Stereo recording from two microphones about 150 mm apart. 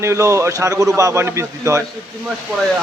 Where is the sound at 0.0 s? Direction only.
20° right (ahead or behind).